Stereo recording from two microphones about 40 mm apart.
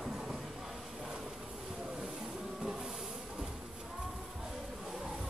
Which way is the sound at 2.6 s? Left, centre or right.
Centre.